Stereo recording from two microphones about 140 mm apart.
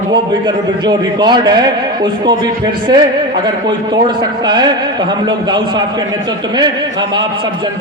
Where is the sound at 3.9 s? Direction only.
35° right (ahead or behind).